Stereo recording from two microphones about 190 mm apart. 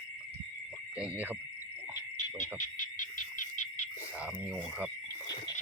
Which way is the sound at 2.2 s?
40° left (ahead or behind).